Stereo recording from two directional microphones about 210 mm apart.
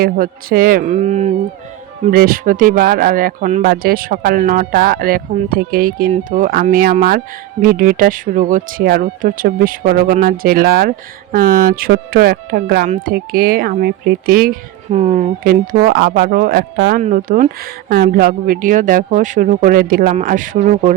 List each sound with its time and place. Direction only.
0.0 s speech: 45° right (ahead or behind)
17.0 s speech: 40° right (ahead or behind)